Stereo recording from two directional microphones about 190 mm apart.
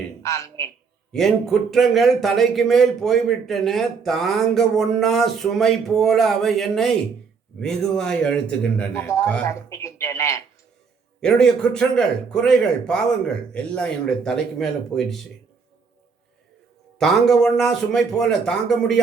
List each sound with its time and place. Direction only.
0.2 s a man's voice: 15° left (ahead or behind)
1.1 s a man's voice: centre (ahead or behind)
11.2 s speech: 5° left (ahead or behind)
17.0 s speech: centre (ahead or behind)